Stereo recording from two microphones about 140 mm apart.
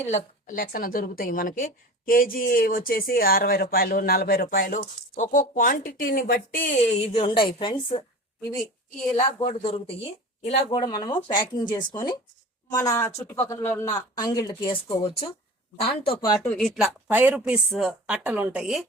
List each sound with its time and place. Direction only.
0.1 s a woman's voice: 60° left (ahead or behind); by 4.9 s 90° left
5.1 s speech: 65° left (ahead or behind); by 8.0 s 40° left (ahead or behind)
9.4 s speech: 40° left (ahead or behind)
10.6 s speech: 30° left (ahead or behind)
13.9 s speech: 25° left (ahead or behind)
16.2 s speech: 30° left (ahead or behind)
16.5 s a woman's voice: centre (ahead or behind)
17.1 s a woman's voice: 15° right (ahead or behind)